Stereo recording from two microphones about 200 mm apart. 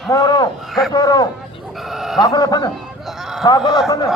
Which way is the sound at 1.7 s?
Centre (ahead or behind).